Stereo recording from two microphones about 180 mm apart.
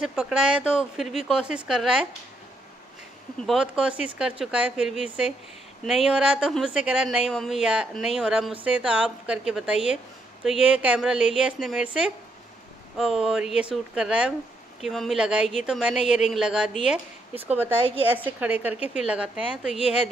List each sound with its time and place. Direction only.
0.0 s a woman's voice: 5° right (ahead or behind)
3.3 s a woman's voice: centre (ahead or behind)